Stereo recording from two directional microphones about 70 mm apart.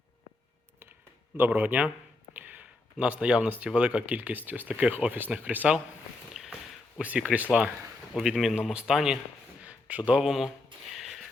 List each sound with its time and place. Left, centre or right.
1.4 s speech: right
2.3 s a sound: right
3.0 s speech: centre
6.3 s walk: centre
7.0 s speech: centre
8.1 s speech: centre
10.9 s a sound: centre